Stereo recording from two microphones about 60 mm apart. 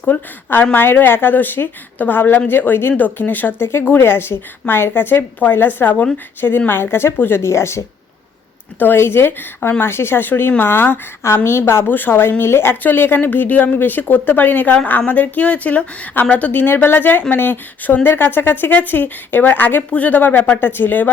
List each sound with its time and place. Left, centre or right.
0.1 s a woman's voice: left
8.8 s a woman's voice: left
9.8 s a woman's voice: left